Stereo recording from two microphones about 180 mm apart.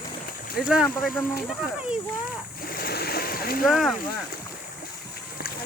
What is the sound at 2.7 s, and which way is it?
Splash, 55° left (ahead or behind).